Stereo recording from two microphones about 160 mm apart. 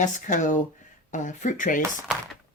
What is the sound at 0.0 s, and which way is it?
Speech, 50° left (ahead or behind).